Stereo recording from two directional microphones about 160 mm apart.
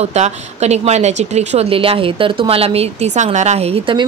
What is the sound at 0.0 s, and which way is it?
Speech, 45° right (ahead or behind).